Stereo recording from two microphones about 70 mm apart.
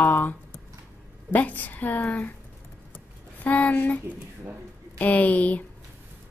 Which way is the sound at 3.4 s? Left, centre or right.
Left.